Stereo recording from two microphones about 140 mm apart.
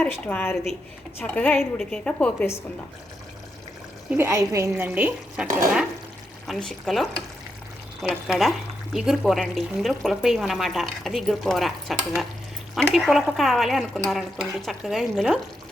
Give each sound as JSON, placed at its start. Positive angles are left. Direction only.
{"t": 0.0, "sound": "a woman's voice", "side_deg": 10}
{"t": 4.1, "sound": "speech", "side_deg": -15}
{"t": 6.5, "sound": "speech", "side_deg": 5}